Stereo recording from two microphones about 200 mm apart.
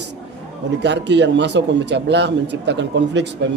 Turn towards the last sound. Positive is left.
turn(degrees=-60)  # may be behind; listen again after turning